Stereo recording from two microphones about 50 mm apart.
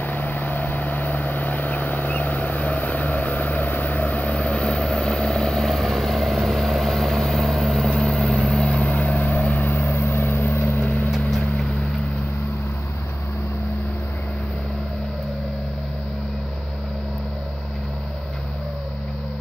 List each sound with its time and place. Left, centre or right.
0.0 s vehicle: left
10.8 s vehicle: left
11.1 s vehicle: centre